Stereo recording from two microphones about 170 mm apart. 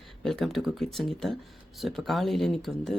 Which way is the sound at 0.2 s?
Centre (ahead or behind).